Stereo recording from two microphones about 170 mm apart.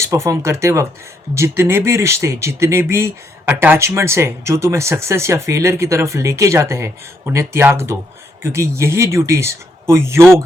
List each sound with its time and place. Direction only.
0.0 s speech: 15° right (ahead or behind)